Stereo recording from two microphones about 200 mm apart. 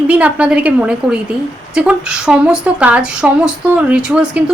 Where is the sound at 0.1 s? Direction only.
5° right (ahead or behind).